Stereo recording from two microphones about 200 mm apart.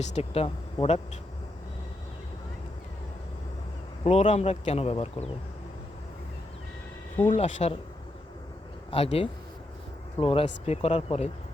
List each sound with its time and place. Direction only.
0.0 s a man's voice: 35° left (ahead or behind)
4.0 s a man's voice: 35° left (ahead or behind)
7.3 s a man's voice: 35° left (ahead or behind)
8.9 s a man's voice: 30° left (ahead or behind)